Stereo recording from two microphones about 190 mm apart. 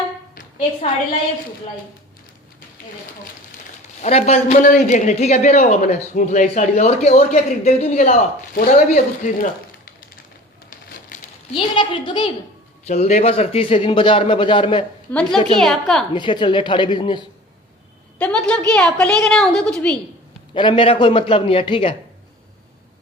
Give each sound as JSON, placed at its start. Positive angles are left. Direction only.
{"t": 4.0, "sound": "a man's voice", "side_deg": 35}
{"t": 11.5, "sound": "a man's voice", "side_deg": 25}
{"t": 15.1, "sound": "a woman's voice", "side_deg": 5}
{"t": 16.1, "sound": "a man's voice", "side_deg": 25}
{"t": 18.2, "sound": "a woman's voice", "side_deg": 5}
{"t": 20.5, "sound": "a man's voice", "side_deg": 25}